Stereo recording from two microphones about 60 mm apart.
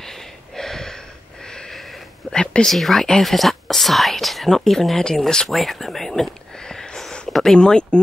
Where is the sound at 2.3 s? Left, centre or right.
Centre.